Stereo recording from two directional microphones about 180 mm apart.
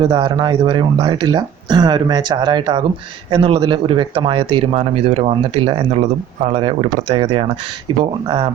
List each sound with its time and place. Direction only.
0.0 s speech: 25° right (ahead or behind)